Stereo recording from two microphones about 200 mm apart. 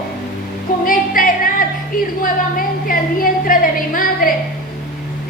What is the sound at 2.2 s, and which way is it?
Speech, 45° left (ahead or behind).